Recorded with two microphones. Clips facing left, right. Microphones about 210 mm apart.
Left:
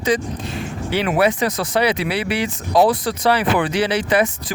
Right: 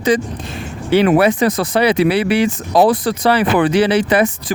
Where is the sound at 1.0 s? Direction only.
45° right (ahead or behind).